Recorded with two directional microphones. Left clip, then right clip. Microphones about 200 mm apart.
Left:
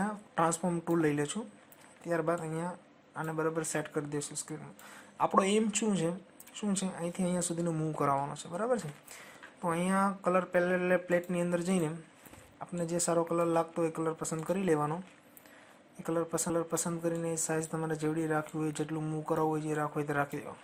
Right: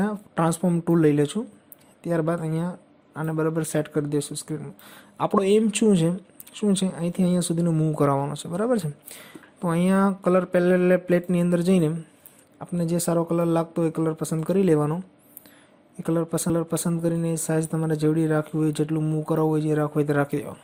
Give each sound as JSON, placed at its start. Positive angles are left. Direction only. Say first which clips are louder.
{"t": 0.0, "sound": "speech", "louder": "right 6 dB", "side_deg": -45}
{"t": 16.0, "sound": "speech", "louder": "right 8 dB", "side_deg": -45}